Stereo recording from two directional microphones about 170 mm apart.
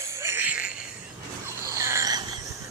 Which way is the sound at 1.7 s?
15° right (ahead or behind).